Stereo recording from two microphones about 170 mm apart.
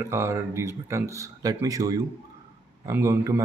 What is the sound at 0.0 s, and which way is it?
Speech, 15° right (ahead or behind).